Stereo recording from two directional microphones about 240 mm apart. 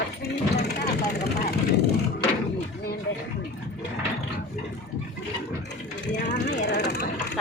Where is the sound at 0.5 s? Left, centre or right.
Left.